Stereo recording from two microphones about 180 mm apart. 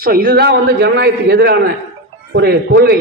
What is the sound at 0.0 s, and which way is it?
A man's voice, 55° right (ahead or behind).